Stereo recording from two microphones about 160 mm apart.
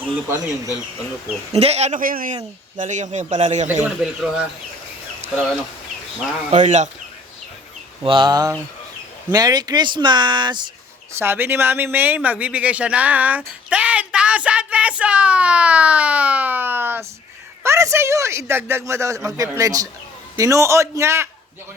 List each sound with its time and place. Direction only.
0.0 s speech: 10° right (ahead or behind)
1.5 s speech: 40° right (ahead or behind); by 2.3 s 60° right (ahead or behind)
2.3 s speech: 50° right (ahead or behind)
3.8 s speech: 5° right (ahead or behind)
6.5 s speech: 50° right (ahead or behind)
8.0 s speech: 30° right (ahead or behind)
11.2 s a man's voice: 15° right (ahead or behind)